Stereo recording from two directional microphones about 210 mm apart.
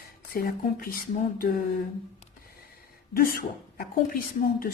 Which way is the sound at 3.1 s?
45° left (ahead or behind).